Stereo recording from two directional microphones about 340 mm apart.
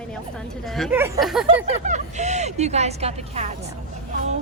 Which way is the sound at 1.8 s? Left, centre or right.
Right.